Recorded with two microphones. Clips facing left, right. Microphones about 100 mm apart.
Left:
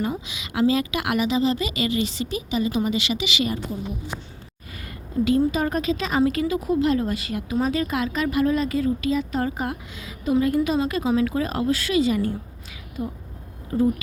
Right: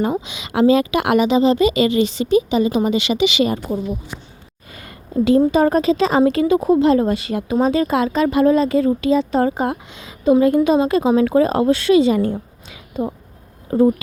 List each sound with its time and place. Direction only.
0.0 s a woman's voice: 30° right (ahead or behind)
4.8 s a sound: 30° right (ahead or behind)
5.5 s a woman's voice: 35° right (ahead or behind)
13.7 s speech: 30° right (ahead or behind)